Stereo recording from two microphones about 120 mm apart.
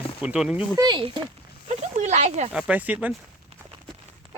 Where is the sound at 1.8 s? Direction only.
70° right (ahead or behind).